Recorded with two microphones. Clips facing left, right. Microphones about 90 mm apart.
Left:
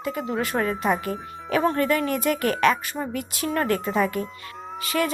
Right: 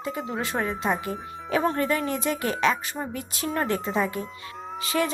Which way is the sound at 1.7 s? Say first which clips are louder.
Left 3 dB; 35° right (ahead or behind).